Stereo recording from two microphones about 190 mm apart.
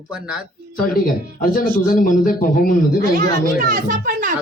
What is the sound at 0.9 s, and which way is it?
A man's voice, 50° left (ahead or behind).